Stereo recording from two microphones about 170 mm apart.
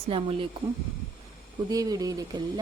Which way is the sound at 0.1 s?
30° right (ahead or behind).